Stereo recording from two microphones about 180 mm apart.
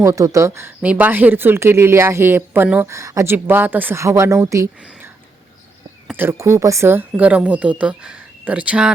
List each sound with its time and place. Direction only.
0.0 s speech: 15° right (ahead or behind)
6.1 s speech: 15° right (ahead or behind)